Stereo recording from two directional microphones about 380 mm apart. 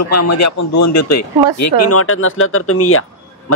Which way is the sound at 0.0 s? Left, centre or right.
Left.